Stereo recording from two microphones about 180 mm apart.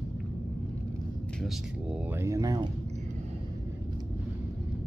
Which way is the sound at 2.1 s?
15° right (ahead or behind).